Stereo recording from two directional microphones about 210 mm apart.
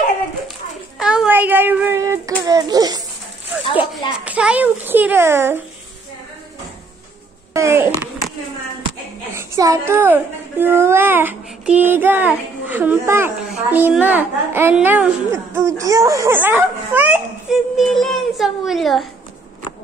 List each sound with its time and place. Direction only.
0.9 s child singing: 5° right (ahead or behind)
2.4 s speech: 15° right (ahead or behind)
3.5 s speech: 5° right (ahead or behind)
7.5 s speech: 15° right (ahead or behind)
9.3 s speech: 15° right (ahead or behind)